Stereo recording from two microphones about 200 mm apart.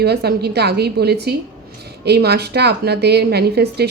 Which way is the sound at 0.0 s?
55° right (ahead or behind).